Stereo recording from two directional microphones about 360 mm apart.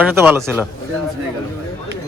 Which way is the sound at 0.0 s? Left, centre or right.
Centre.